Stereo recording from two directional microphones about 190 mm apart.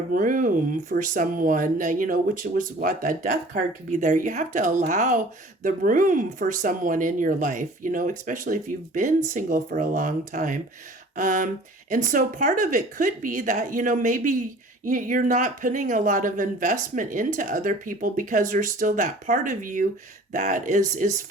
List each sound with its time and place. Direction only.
0.1 s speech: 45° right (ahead or behind)